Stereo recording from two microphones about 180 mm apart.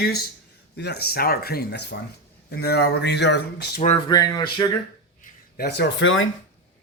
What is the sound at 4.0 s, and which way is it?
Speech, 25° left (ahead or behind).